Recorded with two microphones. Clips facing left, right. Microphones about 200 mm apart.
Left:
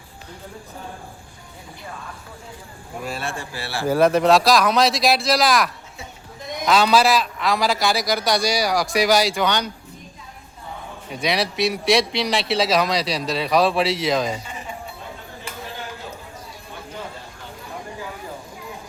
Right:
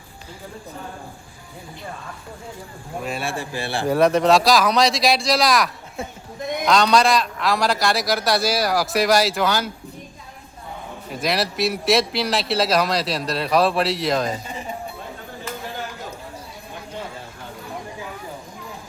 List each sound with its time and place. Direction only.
3.0 s speech: centre (ahead or behind)
3.3 s a man's voice: 20° right (ahead or behind)
3.8 s speech: centre (ahead or behind)
11.1 s speech: centre (ahead or behind)